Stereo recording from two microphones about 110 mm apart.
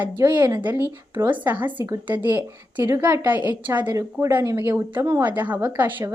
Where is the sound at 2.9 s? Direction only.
25° right (ahead or behind).